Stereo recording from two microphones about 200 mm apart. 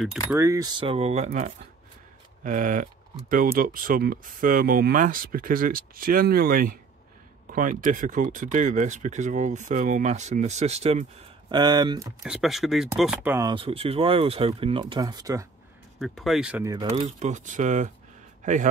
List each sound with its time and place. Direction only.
0.3 s speech: 15° right (ahead or behind); by 11.1 s 30° right (ahead or behind)
11.4 s speech: 20° right (ahead or behind)
12.2 s speech: centre (ahead or behind)
13.5 s speech: 25° right (ahead or behind)
16.0 s speech: centre (ahead or behind)
16.9 s speech: 35° right (ahead or behind)